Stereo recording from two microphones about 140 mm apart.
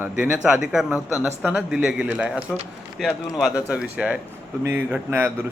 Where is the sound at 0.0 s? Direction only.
10° right (ahead or behind).